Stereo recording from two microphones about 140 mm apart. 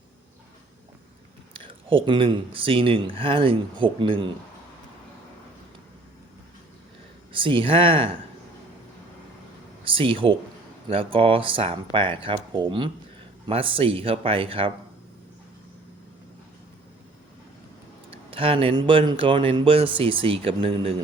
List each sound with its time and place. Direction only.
1.5 s speech: 40° right (ahead or behind)
7.3 s speech: 40° right (ahead or behind)
9.8 s speech: 40° right (ahead or behind)
18.3 s speech: 40° right (ahead or behind)